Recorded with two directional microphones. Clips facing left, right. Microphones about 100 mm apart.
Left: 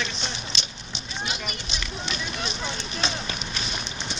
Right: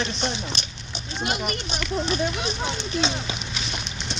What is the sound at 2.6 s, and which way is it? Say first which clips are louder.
Speech: right 7 dB; 20° right (ahead or behind).